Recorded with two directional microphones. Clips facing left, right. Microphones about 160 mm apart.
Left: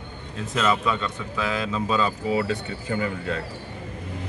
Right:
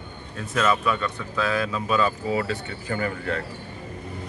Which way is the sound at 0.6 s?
25° left (ahead or behind).